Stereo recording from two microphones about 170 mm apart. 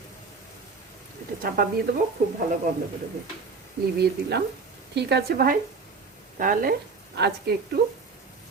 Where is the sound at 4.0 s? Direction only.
75° right (ahead or behind).